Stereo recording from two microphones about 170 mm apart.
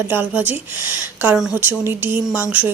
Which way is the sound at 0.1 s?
10° right (ahead or behind).